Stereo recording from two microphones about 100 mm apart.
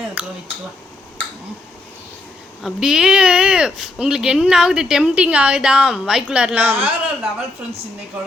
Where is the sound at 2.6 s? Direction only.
5° right (ahead or behind).